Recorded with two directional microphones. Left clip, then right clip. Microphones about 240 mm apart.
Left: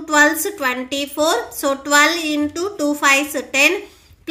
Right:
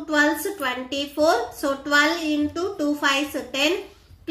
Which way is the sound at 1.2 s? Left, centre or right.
Left.